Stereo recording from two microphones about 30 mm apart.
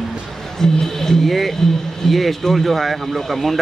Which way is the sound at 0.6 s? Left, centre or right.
Centre.